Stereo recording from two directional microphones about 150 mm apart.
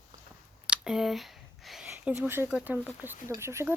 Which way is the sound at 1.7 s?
5° right (ahead or behind).